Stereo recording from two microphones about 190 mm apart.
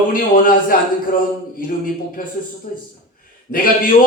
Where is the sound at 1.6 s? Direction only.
50° left (ahead or behind).